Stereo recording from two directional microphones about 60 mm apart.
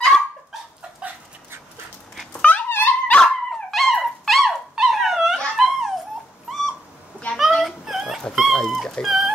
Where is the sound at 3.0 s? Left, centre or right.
Centre.